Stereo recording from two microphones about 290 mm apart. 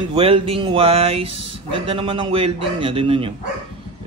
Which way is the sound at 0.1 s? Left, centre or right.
Centre.